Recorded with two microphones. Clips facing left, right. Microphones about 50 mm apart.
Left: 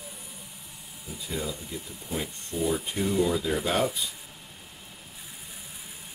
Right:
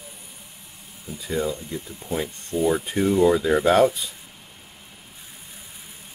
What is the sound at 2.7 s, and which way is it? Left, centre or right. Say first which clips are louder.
Speech: right 7 dB; right.